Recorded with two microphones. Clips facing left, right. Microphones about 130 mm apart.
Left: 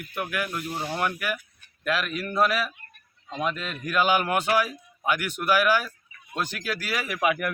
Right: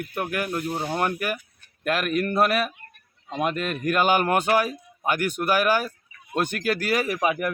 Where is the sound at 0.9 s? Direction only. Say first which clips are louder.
Right 1 dB; 45° right (ahead or behind).